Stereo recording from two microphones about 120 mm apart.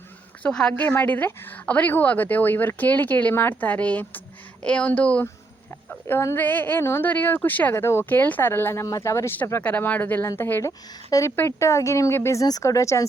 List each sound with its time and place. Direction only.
0.4 s a woman's voice: 5° left (ahead or behind)
0.7 s a woman's voice: 15° left (ahead or behind)